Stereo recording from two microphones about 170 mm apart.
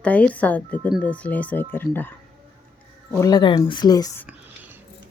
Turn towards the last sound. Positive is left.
turn(degrees=20)  # may be behind; listen again after turning